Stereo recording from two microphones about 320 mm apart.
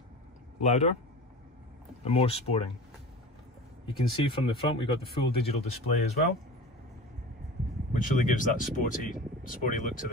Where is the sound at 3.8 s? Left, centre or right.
Centre.